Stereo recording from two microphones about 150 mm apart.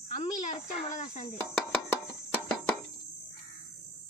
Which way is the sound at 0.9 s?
55° left (ahead or behind).